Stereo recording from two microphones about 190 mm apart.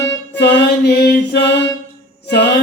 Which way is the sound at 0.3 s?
60° left (ahead or behind).